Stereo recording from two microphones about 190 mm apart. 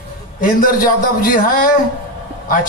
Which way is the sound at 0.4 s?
45° left (ahead or behind).